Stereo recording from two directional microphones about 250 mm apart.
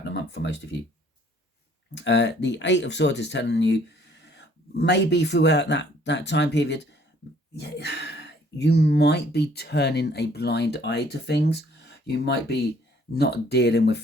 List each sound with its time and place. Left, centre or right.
0.0 s a sound: left
0.7 s speech: left
2.0 s speech: left